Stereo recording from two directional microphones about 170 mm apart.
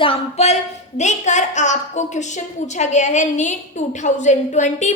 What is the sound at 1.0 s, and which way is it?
A woman's voice, 45° left (ahead or behind).